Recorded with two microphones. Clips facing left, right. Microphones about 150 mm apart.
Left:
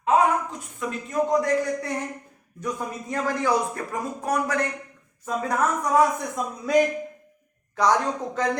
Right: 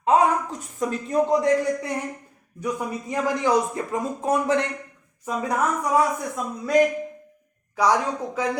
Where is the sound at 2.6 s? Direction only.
10° right (ahead or behind).